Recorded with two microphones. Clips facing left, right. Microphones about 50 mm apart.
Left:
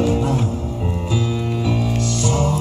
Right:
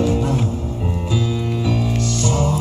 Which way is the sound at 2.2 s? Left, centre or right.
Centre.